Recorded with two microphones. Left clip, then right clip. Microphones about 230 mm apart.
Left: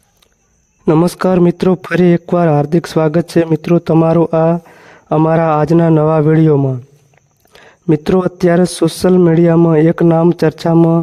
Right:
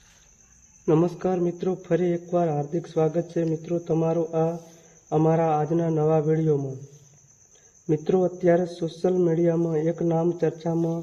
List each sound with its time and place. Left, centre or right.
0.9 s a man's voice: left
7.9 s a man's voice: left